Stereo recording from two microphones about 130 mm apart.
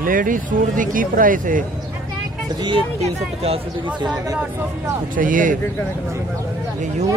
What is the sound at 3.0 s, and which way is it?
Speech, 50° right (ahead or behind).